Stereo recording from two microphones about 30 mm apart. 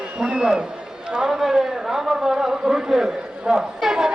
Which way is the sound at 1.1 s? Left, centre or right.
Right.